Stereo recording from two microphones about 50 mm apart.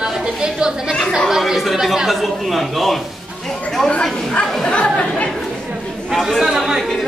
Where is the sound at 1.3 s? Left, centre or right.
Centre.